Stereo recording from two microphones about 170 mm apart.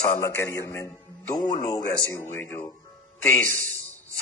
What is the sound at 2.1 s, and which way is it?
Speech, 15° left (ahead or behind).